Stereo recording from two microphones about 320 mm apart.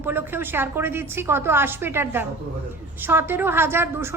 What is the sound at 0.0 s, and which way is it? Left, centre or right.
A woman's voice, centre.